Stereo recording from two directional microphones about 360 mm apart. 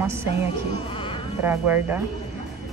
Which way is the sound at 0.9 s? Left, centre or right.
Centre.